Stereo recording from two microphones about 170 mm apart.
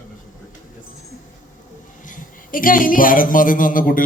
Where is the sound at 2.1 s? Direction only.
50° left (ahead or behind).